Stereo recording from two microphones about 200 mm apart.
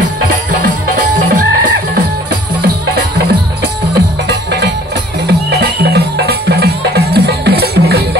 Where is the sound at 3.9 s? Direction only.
55° right (ahead or behind).